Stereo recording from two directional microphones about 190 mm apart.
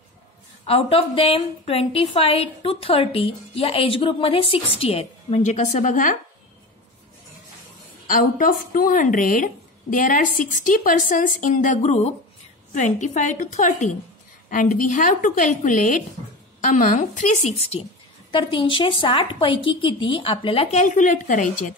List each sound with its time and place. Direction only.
0.7 s a woman's voice: 30° left (ahead or behind)
8.1 s a woman's voice: 45° left (ahead or behind)